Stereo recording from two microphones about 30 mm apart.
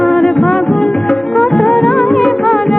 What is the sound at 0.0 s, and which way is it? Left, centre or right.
Music, left.